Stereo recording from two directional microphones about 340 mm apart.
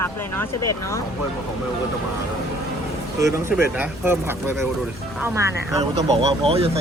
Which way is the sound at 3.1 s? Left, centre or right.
Centre.